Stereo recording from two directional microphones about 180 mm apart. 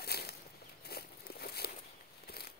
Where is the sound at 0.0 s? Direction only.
60° left (ahead or behind).